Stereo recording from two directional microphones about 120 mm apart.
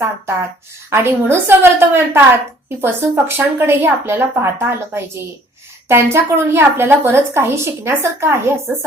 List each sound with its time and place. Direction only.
0.0 s a woman's voice: 25° right (ahead or behind)